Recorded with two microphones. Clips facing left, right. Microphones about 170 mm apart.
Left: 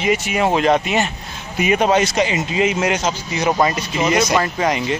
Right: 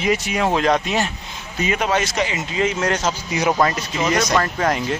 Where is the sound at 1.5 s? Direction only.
20° left (ahead or behind).